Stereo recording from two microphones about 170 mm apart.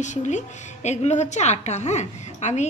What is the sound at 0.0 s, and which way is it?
A woman's voice, 45° left (ahead or behind).